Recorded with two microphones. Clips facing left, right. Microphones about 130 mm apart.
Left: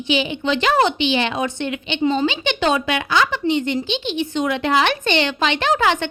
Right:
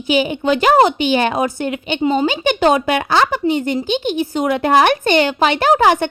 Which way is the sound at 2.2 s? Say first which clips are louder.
Right 5 dB; 40° right (ahead or behind).